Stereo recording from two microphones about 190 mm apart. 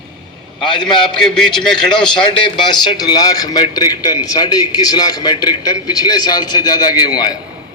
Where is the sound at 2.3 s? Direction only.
25° left (ahead or behind).